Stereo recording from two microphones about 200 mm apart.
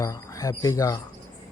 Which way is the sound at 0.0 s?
15° left (ahead or behind).